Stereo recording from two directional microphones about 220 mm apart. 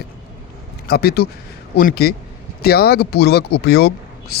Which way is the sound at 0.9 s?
45° left (ahead or behind).